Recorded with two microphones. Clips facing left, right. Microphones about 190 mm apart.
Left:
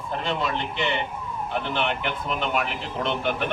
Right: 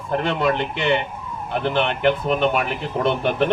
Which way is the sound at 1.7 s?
50° right (ahead or behind).